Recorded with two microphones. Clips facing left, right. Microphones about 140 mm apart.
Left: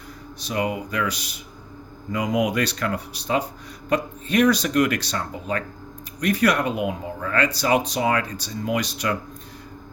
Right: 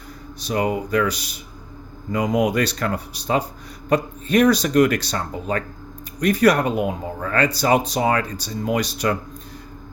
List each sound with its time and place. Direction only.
0.3 s speech: 40° right (ahead or behind)
2.1 s speech: 40° right (ahead or behind)